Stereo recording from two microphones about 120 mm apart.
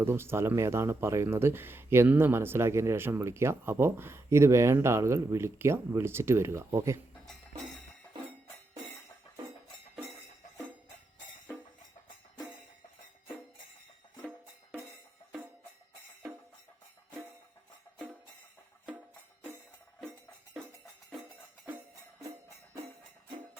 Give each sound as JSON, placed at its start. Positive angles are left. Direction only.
{"t": 0.0, "sound": "speech", "side_deg": -20}